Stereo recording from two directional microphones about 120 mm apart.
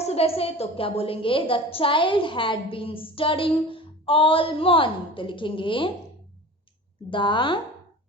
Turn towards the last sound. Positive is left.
turn(degrees=40)  # may be behind; listen again after turning